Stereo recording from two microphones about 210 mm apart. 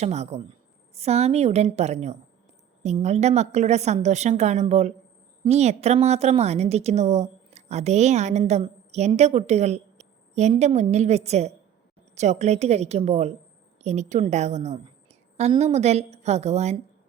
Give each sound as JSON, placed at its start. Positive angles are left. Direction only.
{"t": 0.0, "sound": "a woman's voice", "side_deg": -30}